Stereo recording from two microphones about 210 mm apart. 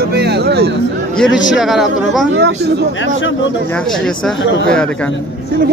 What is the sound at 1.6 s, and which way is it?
Speech, centre (ahead or behind).